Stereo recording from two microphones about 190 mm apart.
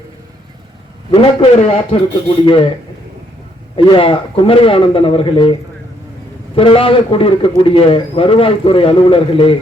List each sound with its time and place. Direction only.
1.1 s a man's voice: 30° left (ahead or behind)
3.8 s a man's voice: 25° left (ahead or behind)
6.6 s a man's voice: 30° left (ahead or behind)